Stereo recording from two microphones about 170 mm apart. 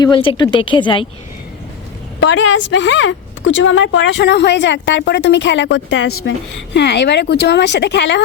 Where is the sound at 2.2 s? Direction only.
90° left.